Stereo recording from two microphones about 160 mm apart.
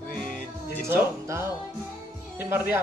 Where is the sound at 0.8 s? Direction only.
15° right (ahead or behind).